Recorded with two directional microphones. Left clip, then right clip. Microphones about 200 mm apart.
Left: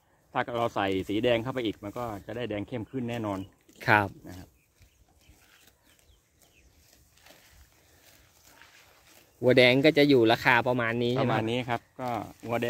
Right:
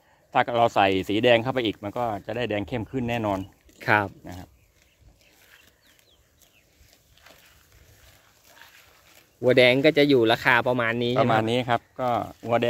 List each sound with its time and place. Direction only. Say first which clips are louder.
0.3 s speech: right 8 dB; 45° right (ahead or behind)
3.7 s speech: right 1 dB; 10° left (ahead or behind)
4.2 s speech: right 5 dB; 35° right (ahead or behind)
8.6 s dog: right 5 dB; 40° right (ahead or behind)
9.4 s speech: right 3 dB; 10° left (ahead or behind)
11.1 s speech: right 6 dB; 40° right (ahead or behind)